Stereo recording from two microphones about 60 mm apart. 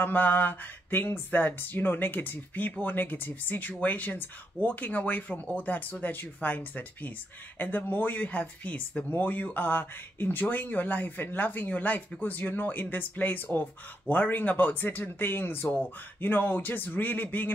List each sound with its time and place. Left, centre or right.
0.0 s speech: left